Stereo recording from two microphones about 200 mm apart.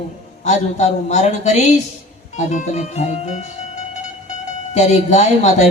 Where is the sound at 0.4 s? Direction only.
35° left (ahead or behind).